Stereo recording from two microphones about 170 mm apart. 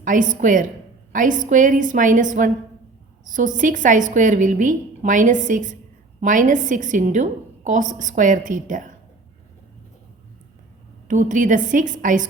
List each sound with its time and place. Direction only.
0.0 s a woman's voice: 50° right (ahead or behind)
11.1 s a woman's voice: 50° right (ahead or behind)